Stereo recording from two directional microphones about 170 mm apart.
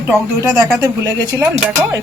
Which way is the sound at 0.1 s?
20° right (ahead or behind).